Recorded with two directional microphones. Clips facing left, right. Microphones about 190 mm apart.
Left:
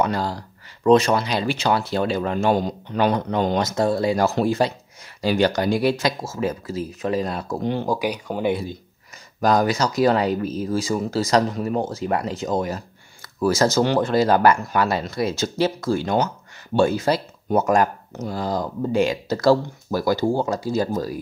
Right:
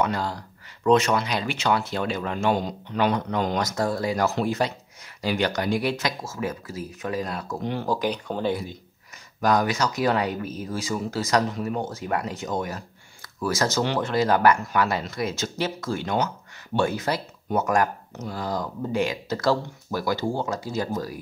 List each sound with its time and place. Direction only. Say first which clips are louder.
0.0 s speech: left 3 dB; 35° left (ahead or behind)
7.8 s speech: left 2 dB; 10° left (ahead or behind)
9.4 s speech: left 3 dB; 35° left (ahead or behind)